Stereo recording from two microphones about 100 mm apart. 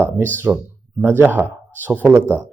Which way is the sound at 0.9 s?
25° right (ahead or behind).